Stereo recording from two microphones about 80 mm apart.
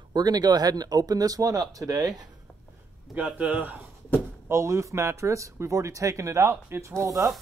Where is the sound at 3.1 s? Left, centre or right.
Centre.